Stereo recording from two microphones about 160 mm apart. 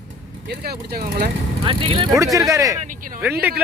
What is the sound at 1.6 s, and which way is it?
Speech, 35° right (ahead or behind).